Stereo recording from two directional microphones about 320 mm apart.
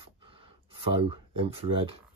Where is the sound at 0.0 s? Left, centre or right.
Centre.